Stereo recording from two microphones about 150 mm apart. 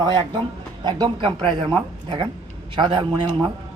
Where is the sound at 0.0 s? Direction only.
30° right (ahead or behind).